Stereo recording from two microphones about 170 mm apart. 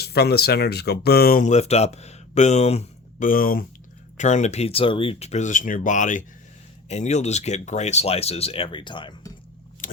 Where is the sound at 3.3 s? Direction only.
55° left (ahead or behind).